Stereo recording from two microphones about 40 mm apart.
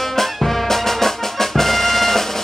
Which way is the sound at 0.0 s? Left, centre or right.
Centre.